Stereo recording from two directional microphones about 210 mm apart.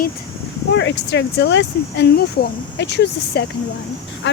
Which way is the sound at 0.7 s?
55° left (ahead or behind).